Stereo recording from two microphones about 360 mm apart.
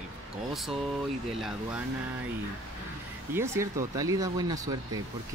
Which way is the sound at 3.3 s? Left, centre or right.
Centre.